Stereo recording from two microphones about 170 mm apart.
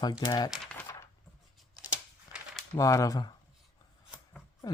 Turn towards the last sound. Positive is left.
turn(degrees=20)  # may be behind; listen again after turning